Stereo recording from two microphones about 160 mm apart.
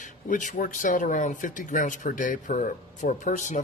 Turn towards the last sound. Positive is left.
turn(degrees=50)  # may be behind; listen again after turning